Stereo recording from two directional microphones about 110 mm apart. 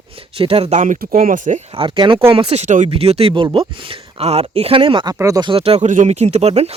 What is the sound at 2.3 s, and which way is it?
Speech, 65° right (ahead or behind).